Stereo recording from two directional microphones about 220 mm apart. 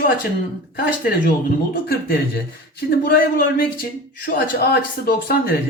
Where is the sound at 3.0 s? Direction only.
40° left (ahead or behind).